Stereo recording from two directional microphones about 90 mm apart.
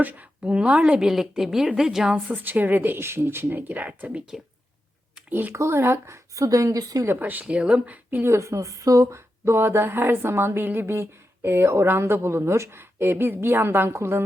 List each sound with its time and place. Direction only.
0.0 s a woman's voice: 15° right (ahead or behind)
5.3 s speech: 20° right (ahead or behind); by 7.1 s 40° right (ahead or behind)
7.1 s a woman's voice: 20° right (ahead or behind)
8.3 s speech: 30° right (ahead or behind)